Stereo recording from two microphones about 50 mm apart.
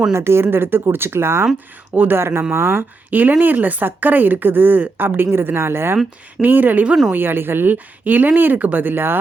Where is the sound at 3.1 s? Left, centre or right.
Right.